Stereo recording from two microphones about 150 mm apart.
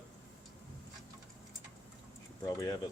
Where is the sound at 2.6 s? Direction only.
20° left (ahead or behind).